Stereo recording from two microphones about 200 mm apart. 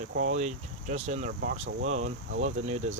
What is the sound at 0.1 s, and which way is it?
Speech, 90° right.